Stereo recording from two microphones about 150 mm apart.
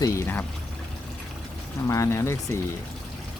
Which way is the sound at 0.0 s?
20° left (ahead or behind).